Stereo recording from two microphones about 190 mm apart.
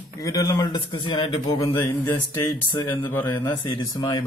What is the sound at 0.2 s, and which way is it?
Speech, 20° left (ahead or behind).